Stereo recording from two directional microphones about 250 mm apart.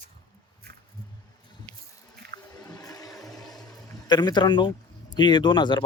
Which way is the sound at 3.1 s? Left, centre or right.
Centre.